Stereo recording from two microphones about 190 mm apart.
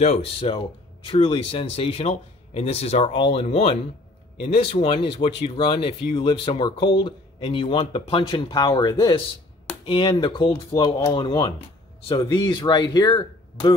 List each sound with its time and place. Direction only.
0.0 s speech: 30° left (ahead or behind)